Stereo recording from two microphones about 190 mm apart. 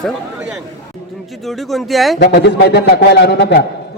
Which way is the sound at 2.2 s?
60° left (ahead or behind).